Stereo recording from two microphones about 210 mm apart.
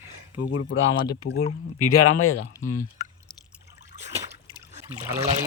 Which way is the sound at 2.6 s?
70° left (ahead or behind).